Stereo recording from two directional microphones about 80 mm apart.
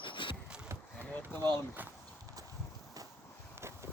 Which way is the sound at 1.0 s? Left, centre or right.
Centre.